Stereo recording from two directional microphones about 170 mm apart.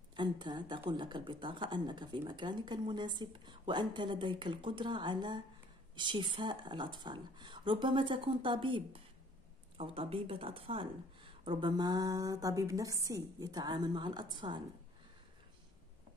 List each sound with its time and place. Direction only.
0.1 s speech: 25° right (ahead or behind)